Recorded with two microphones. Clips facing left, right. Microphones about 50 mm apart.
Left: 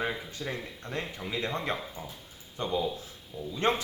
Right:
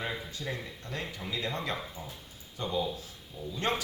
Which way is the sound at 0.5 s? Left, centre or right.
Left.